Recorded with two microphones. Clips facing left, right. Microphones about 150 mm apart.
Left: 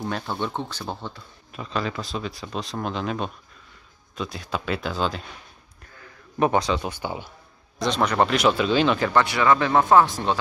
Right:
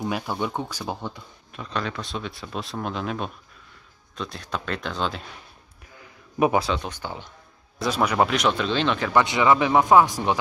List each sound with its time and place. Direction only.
0.0 s speech: 10° right (ahead or behind)
1.5 s speech: centre (ahead or behind)
5.9 s a man's voice: 10° right (ahead or behind); by 7.3 s 10° left (ahead or behind)
7.8 s speech: 10° right (ahead or behind)
9.1 s speech: 20° right (ahead or behind)